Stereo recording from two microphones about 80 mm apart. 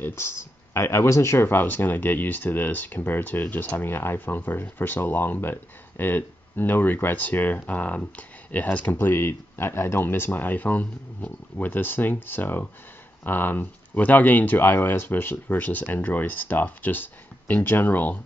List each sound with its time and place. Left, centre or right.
0.0 s speech: left